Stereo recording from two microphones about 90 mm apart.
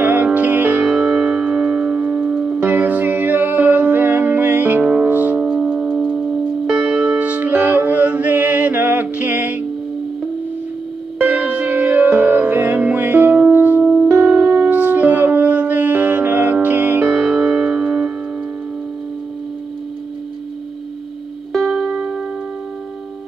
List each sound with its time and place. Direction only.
0.0 s music: 20° right (ahead or behind)
0.8 s music: 5° right (ahead or behind)
7.2 s music: 15° right (ahead or behind)
11.1 s music: 15° right (ahead or behind)
17.0 s music: 5° right (ahead or behind)
21.5 s music: 5° left (ahead or behind)
21.9 s music: 5° right (ahead or behind)